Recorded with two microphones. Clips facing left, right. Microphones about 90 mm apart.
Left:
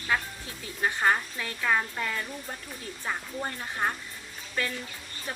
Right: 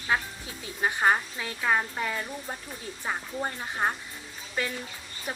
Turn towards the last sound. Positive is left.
turn(degrees=-15)  # may be behind; listen again after turning